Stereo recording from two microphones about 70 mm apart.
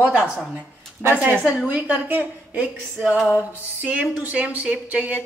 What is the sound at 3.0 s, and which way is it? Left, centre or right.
Speech, centre.